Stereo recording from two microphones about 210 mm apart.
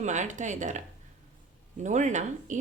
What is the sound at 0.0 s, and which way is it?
Speech, 35° right (ahead or behind).